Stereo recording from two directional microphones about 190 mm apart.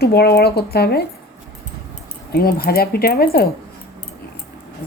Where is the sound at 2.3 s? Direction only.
55° left (ahead or behind).